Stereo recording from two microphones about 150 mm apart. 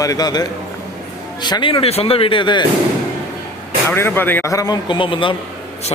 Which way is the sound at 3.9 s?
15° left (ahead or behind).